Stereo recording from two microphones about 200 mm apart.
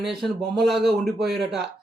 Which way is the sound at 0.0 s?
Centre (ahead or behind).